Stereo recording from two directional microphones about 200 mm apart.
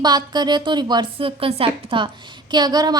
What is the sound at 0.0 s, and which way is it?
A woman's voice, 20° right (ahead or behind).